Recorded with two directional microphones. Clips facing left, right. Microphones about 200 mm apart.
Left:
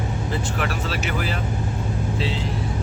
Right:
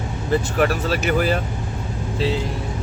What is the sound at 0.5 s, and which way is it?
Speech, 45° right (ahead or behind).